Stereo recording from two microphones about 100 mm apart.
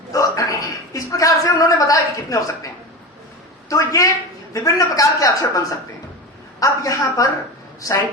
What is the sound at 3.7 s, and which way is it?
Speech, 35° left (ahead or behind).